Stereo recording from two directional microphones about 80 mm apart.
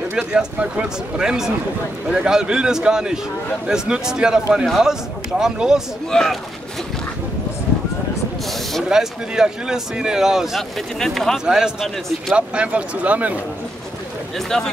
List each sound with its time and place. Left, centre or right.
0.3 s a man's voice: centre
6.1 s speech: centre
8.8 s a man's voice: centre
11.4 s speech: centre
14.5 s a man's voice: centre